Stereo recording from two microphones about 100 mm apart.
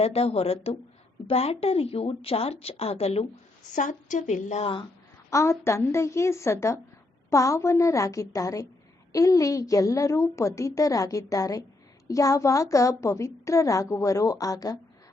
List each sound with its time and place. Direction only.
0.0 s a woman's voice: 90° left
4.6 s speech: 55° left (ahead or behind)
5.3 s a woman's voice: 30° left (ahead or behind)